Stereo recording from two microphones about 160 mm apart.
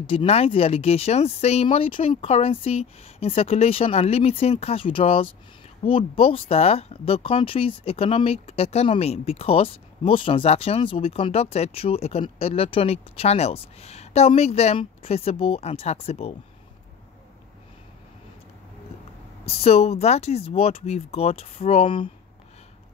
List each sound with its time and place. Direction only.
0.0 s speech: 35° left (ahead or behind)
19.4 s speech: 40° left (ahead or behind)